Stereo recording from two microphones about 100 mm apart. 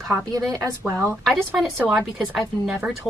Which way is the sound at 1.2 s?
5° right (ahead or behind).